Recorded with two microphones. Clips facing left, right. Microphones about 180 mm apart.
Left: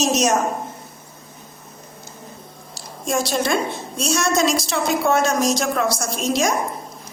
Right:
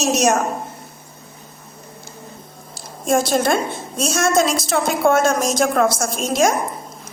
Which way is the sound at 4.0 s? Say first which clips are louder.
Right 2 dB; 50° right (ahead or behind).